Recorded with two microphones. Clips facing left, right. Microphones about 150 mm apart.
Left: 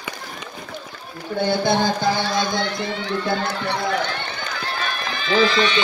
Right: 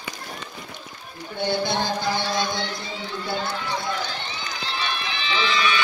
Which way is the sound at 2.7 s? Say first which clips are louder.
Left 7 dB; 70° left (ahead or behind).